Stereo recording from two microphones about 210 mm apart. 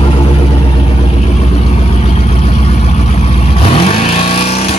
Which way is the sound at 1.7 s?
30° left (ahead or behind).